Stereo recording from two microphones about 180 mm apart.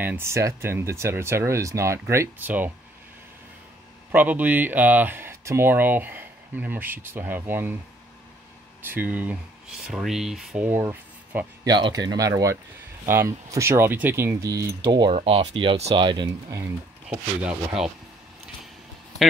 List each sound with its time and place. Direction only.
0.0 s speech: 10° right (ahead or behind)
4.1 s speech: 10° right (ahead or behind)
8.8 s speech: 10° right (ahead or behind)
11.6 s speech: 25° right (ahead or behind)
17.1 s speech: 5° right (ahead or behind)